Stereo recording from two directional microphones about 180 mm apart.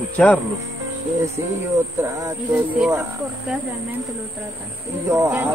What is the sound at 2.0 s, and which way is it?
Speech, 15° right (ahead or behind).